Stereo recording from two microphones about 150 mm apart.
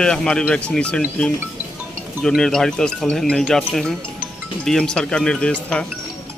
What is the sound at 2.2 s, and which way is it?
Speech, 5° left (ahead or behind).